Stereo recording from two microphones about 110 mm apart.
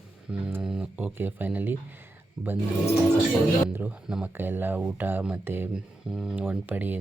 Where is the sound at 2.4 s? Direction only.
5° right (ahead or behind).